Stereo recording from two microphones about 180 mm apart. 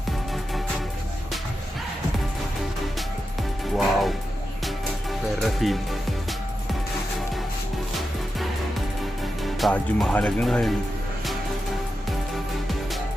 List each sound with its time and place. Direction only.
3.8 s speech: centre (ahead or behind)
5.4 s speech: centre (ahead or behind)
9.4 s speech: centre (ahead or behind)